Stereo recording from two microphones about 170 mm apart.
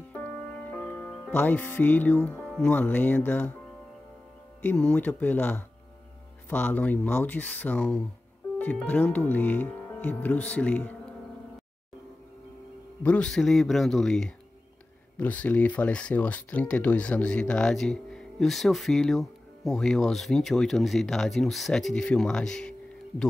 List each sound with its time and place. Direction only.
0.1 s music: 10° left (ahead or behind)
4.6 s speech: 10° left (ahead or behind)
13.0 s speech: 5° left (ahead or behind)